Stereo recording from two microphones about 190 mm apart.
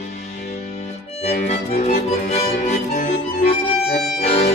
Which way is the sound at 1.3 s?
40° left (ahead or behind).